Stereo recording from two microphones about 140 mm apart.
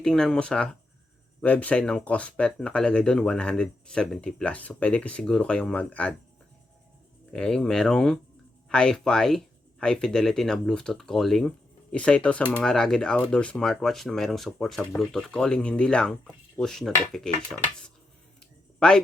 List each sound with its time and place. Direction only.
0.0 s speech: 5° left (ahead or behind)
7.3 s speech: 5° left (ahead or behind)
18.8 s speech: 5° left (ahead or behind)